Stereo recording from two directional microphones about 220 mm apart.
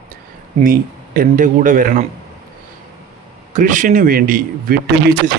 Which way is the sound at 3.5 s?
35° right (ahead or behind).